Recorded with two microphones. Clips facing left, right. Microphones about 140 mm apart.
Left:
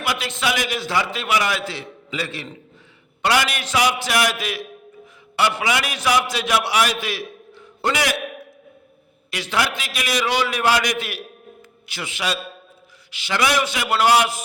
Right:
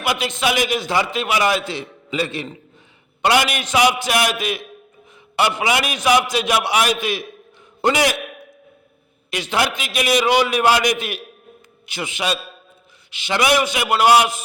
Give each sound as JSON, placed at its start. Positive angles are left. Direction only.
{"t": 0.0, "sound": "a man's voice", "side_deg": -20}
{"t": 9.3, "sound": "a man's voice", "side_deg": -20}